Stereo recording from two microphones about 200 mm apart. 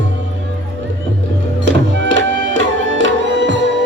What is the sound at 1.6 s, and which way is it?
Music, 65° right (ahead or behind).